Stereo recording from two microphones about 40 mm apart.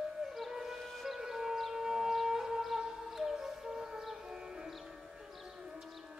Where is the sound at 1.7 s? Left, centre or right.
Centre.